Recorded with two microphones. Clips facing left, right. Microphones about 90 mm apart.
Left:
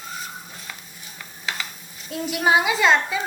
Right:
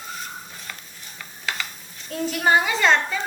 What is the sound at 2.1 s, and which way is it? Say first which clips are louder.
A woman's voice: even; 5° left (ahead or behind).